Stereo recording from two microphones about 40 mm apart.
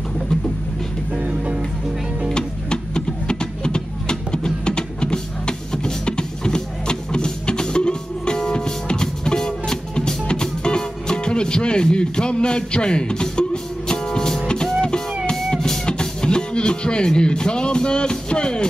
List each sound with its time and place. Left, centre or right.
1.1 s music: right
2.3 s music: left